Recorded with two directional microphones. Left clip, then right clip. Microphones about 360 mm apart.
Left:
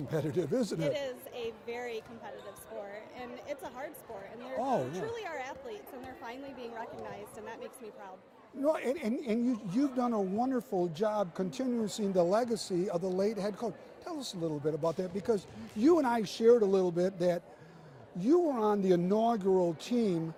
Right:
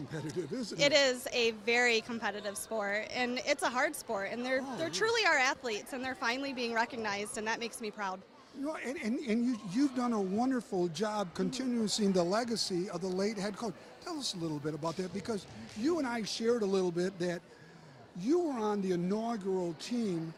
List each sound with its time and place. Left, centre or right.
0.1 s speech: centre
0.8 s a woman's voice: right
8.6 s a woman's voice: centre
15.8 s speech: centre